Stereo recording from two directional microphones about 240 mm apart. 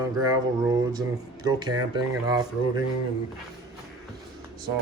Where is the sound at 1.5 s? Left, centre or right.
Centre.